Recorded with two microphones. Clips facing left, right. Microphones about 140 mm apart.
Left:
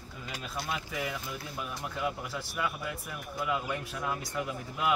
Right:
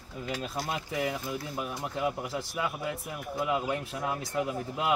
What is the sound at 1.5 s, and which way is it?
Speech, 20° right (ahead or behind).